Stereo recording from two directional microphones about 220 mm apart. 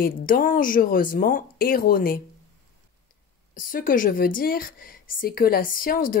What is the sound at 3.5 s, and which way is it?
A woman's voice, 40° left (ahead or behind).